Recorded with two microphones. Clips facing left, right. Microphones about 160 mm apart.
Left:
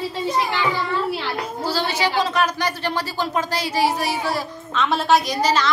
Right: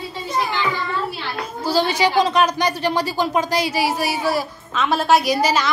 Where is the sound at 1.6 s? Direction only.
15° right (ahead or behind).